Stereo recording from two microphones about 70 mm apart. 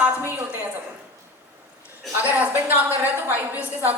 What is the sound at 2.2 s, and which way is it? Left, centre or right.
A woman's voice, right.